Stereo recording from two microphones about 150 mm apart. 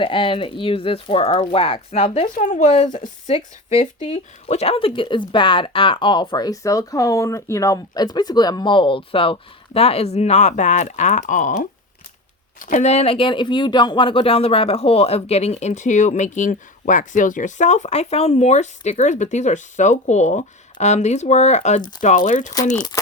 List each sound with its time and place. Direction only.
0.0 s speech: 35° left (ahead or behind)
2.2 s speech: 55° left (ahead or behind)
3.8 s speech: 50° left (ahead or behind)
12.5 s speech: 60° left (ahead or behind)